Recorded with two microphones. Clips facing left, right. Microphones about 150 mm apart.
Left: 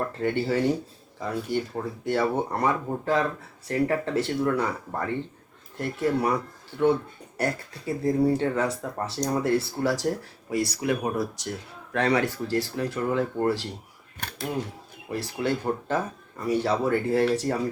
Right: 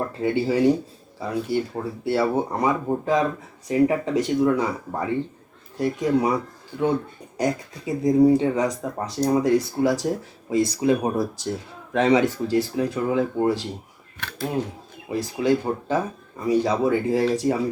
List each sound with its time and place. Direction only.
0.2 s speech: 10° right (ahead or behind)
15.1 s speech: 15° right (ahead or behind)